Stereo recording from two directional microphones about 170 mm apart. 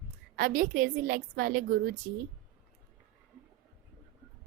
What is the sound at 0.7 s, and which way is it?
Speech, 65° right (ahead or behind).